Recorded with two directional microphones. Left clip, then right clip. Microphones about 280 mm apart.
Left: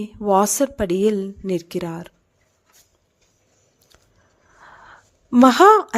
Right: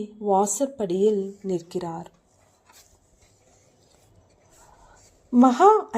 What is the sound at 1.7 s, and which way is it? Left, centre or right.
Speech, left.